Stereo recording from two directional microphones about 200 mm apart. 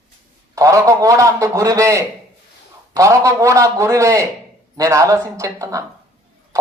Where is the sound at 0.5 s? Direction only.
15° right (ahead or behind).